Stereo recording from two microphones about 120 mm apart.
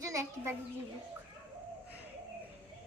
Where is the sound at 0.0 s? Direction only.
25° right (ahead or behind).